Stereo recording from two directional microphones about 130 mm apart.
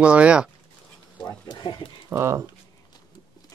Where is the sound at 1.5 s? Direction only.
35° left (ahead or behind).